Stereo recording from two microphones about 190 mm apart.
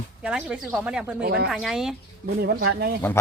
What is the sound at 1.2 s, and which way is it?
Speech, 60° right (ahead or behind).